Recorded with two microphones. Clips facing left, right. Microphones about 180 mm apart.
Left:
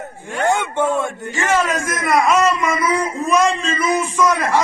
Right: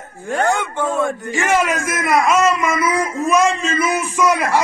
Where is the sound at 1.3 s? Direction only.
10° right (ahead or behind).